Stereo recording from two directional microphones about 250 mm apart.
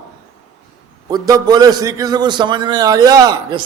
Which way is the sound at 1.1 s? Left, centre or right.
Centre.